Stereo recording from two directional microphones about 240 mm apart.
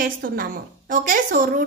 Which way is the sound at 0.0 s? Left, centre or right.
Right.